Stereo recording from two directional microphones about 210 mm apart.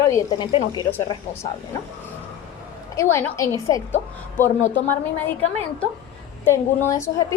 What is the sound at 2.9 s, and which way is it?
Speech, 10° left (ahead or behind).